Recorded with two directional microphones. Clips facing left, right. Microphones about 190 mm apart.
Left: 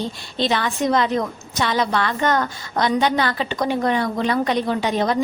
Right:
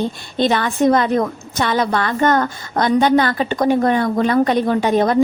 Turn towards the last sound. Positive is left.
turn(degrees=-50)  # may be behind; listen again after turning